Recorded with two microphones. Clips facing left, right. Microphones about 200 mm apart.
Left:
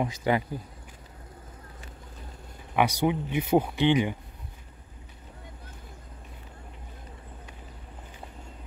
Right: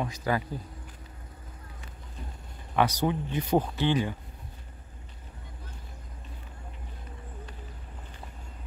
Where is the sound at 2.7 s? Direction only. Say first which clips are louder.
Left 1 dB; 10° left (ahead or behind).